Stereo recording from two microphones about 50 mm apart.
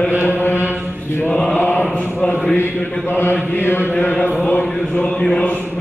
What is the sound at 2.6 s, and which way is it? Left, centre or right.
Speech, left.